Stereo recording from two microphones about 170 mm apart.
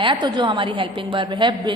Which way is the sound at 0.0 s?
30° right (ahead or behind).